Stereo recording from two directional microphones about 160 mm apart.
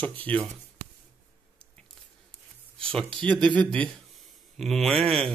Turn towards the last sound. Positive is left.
turn(degrees=5)  # may be behind; listen again after turning